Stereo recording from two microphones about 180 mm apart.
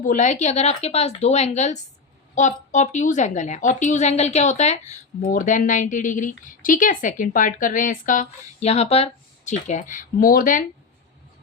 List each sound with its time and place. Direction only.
0.0 s a woman's voice: 45° left (ahead or behind)